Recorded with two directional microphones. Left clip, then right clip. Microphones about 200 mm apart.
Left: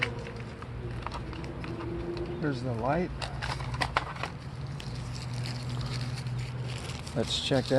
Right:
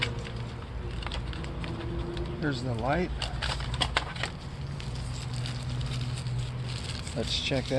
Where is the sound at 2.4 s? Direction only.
20° left (ahead or behind).